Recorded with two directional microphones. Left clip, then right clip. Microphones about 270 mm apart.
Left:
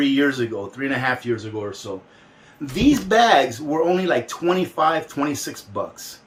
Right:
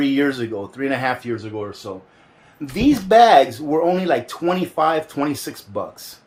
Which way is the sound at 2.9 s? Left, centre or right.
Right.